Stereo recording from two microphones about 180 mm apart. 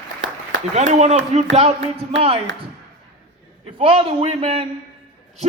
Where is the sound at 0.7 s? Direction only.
35° right (ahead or behind).